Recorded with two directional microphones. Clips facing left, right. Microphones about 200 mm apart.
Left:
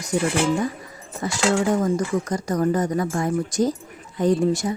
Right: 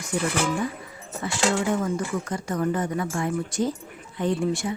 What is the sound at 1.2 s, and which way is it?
A woman's voice, 40° left (ahead or behind).